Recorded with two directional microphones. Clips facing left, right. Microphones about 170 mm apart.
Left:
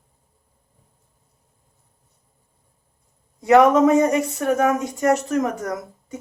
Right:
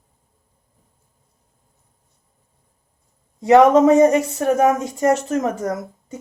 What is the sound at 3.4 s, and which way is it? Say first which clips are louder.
Speech: right 2 dB; 25° right (ahead or behind).